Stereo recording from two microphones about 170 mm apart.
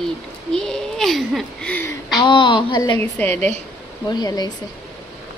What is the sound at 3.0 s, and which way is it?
Speech, 10° left (ahead or behind).